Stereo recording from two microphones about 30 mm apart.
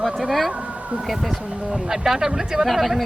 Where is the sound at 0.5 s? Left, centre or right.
Right.